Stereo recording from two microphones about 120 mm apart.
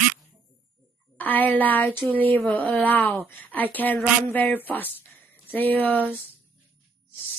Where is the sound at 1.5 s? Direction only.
15° left (ahead or behind).